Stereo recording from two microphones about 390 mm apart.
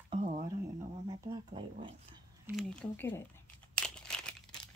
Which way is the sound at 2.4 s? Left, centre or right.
Centre.